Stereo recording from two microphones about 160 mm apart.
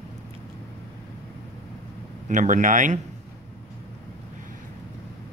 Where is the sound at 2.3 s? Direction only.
55° right (ahead or behind).